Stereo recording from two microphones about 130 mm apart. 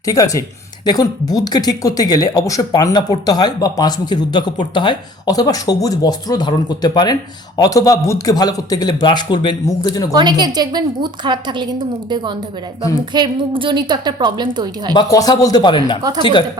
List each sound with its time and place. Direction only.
0.0 s speech: 25° left (ahead or behind)
10.2 s a woman's voice: 35° right (ahead or behind)
14.9 s speech: 30° left (ahead or behind)